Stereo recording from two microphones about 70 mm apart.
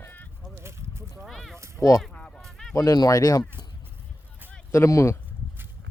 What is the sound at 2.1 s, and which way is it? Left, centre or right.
Honk, centre.